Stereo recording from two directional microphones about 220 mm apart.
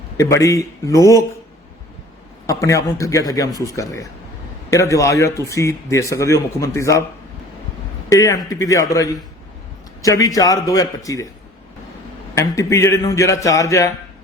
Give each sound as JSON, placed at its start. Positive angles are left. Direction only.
{"t": 0.2, "sound": "speech", "side_deg": 15}
{"t": 2.5, "sound": "speech", "side_deg": 15}
{"t": 8.1, "sound": "speech", "side_deg": 15}
{"t": 12.3, "sound": "speech", "side_deg": 15}